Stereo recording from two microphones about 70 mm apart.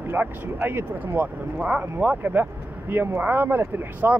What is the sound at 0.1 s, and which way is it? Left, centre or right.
Speech, right.